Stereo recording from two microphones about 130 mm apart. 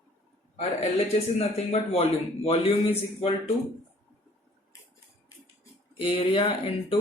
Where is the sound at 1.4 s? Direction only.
50° left (ahead or behind).